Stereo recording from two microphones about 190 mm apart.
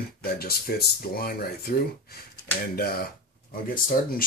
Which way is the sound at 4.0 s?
50° left (ahead or behind).